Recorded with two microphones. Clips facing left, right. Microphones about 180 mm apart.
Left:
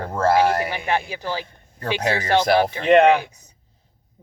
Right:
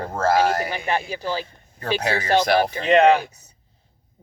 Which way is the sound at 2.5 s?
55° left (ahead or behind).